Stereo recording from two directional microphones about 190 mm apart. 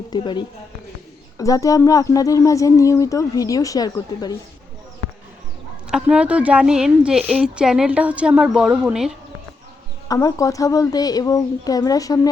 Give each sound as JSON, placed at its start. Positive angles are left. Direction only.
{"t": 0.1, "sound": "a child's voice", "side_deg": 25}
{"t": 5.9, "sound": "a woman's voice", "side_deg": -5}
{"t": 10.1, "sound": "a child's voice", "side_deg": 20}